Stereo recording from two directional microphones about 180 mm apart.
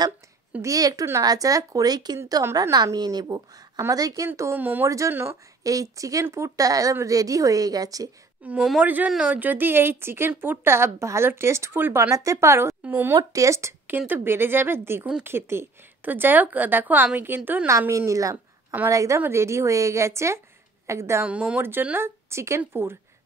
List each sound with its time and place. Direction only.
0.5 s speech: 15° right (ahead or behind)
8.5 s speech: 5° right (ahead or behind)